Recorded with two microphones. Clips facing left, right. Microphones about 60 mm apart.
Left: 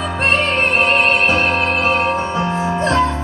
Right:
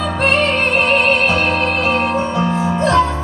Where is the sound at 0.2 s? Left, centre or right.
Left.